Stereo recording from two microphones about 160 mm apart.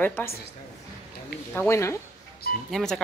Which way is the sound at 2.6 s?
Centre (ahead or behind).